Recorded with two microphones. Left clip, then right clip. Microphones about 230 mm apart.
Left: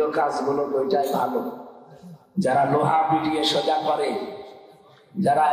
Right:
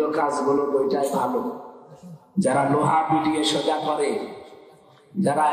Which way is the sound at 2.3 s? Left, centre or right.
Left.